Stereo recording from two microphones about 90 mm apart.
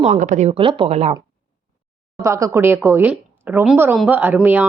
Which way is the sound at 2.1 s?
35° right (ahead or behind).